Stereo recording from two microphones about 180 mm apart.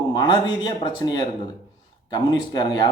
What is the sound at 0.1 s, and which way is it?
Speech, 25° left (ahead or behind).